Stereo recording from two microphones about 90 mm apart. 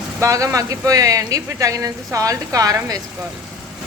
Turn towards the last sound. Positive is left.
turn(degrees=-40)  # may be behind; listen again after turning